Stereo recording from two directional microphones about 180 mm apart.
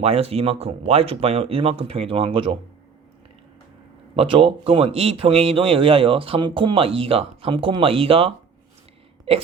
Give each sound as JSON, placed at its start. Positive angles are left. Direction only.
{"t": 0.0, "sound": "speech", "side_deg": -35}
{"t": 4.1, "sound": "speech", "side_deg": -30}